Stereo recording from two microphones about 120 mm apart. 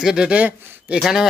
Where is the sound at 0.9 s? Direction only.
5° right (ahead or behind).